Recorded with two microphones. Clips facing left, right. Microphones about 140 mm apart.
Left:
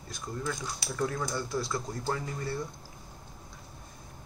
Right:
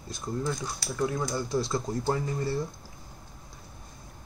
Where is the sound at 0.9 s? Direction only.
15° right (ahead or behind).